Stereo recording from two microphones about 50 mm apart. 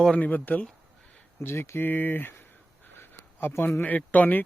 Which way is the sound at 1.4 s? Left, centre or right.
Left.